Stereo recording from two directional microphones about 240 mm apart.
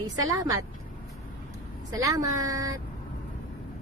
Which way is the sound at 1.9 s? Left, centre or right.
Centre.